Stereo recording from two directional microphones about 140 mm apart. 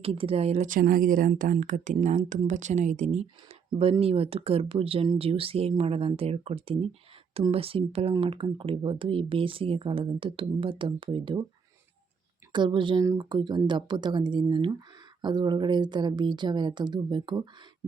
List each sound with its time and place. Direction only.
0.0 s speech: 45° right (ahead or behind)
0.7 s speech: 90° right; by 11.4 s 35° right (ahead or behind)
12.5 s speech: 35° right (ahead or behind)